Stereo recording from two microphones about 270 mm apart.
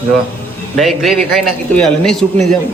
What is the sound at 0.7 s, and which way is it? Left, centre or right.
Speech, centre.